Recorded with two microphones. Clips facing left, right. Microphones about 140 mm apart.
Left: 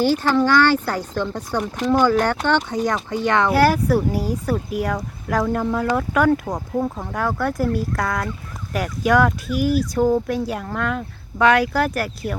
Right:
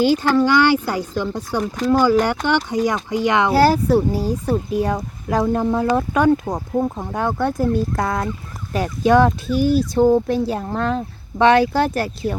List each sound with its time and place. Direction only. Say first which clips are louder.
0.0 s speech: right 2 dB; 15° right (ahead or behind)
3.5 s speech: right 3 dB; 30° right (ahead or behind)